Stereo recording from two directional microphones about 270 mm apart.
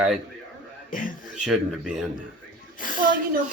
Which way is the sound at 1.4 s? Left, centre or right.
Centre.